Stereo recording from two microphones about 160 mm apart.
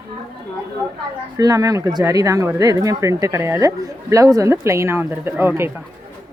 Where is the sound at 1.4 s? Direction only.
20° right (ahead or behind).